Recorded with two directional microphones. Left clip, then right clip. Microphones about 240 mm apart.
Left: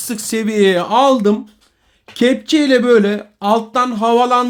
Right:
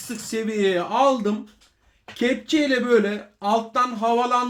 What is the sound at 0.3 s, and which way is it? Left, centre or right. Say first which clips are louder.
Speech: left 8 dB; left.